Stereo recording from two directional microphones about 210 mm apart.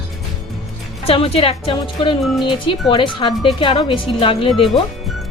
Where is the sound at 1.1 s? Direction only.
25° left (ahead or behind).